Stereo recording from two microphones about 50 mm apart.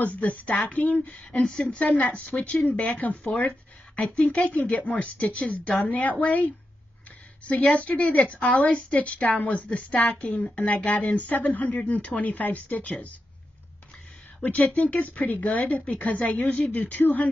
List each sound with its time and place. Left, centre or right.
0.0 s a woman's voice: left
1.4 s a woman's voice: centre
7.7 s a woman's voice: left
11.1 s speech: left
14.4 s a woman's voice: left